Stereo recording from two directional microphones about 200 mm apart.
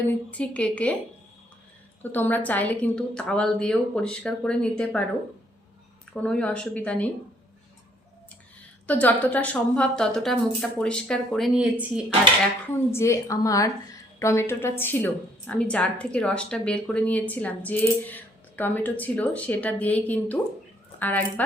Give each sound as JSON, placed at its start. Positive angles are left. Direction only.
{"t": 0.1, "sound": "a woman's voice", "side_deg": 5}
{"t": 2.0, "sound": "a woman's voice", "side_deg": 10}
{"t": 6.2, "sound": "a woman's voice", "side_deg": 5}
{"t": 8.9, "sound": "a woman's voice", "side_deg": 5}
{"t": 12.7, "sound": "a woman's voice", "side_deg": 15}